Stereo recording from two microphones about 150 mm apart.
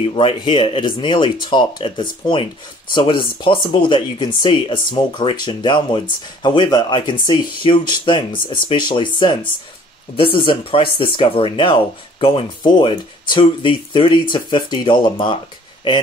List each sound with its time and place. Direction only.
0.0 s speech: 35° left (ahead or behind)